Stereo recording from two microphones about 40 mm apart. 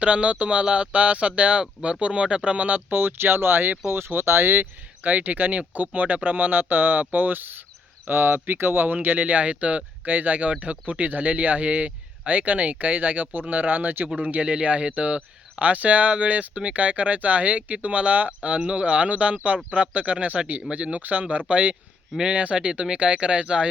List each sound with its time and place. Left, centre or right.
0.0 s speech: right
2.6 s speech: right
3.0 s speech: right
5.0 s speech: right
8.1 s speech: right
10.0 s speech: right